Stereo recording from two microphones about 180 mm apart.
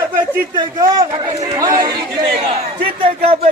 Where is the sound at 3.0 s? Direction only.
35° right (ahead or behind).